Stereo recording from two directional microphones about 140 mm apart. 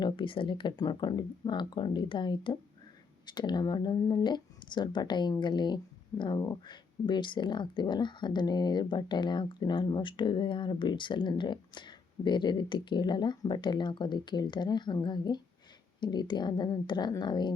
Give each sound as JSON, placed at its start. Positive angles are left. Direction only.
{"t": 0.0, "sound": "speech", "side_deg": 35}